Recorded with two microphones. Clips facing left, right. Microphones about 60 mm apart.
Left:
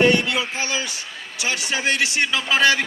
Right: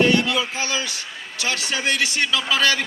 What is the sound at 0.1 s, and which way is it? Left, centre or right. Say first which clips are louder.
A man's voice: even; centre.